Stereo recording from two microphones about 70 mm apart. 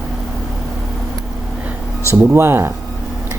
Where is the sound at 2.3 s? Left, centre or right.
Right.